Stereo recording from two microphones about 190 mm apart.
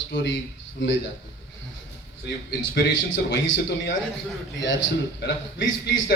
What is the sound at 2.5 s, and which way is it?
A man's voice, 70° left (ahead or behind).